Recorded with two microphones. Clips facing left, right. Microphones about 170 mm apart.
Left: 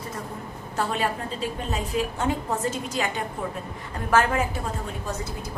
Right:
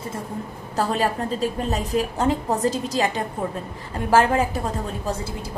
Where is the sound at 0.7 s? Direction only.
40° right (ahead or behind).